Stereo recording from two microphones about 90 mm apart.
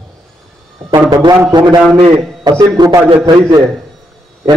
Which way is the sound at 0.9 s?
55° right (ahead or behind).